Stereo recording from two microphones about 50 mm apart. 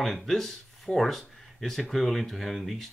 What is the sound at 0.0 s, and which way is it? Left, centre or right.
Speech, centre.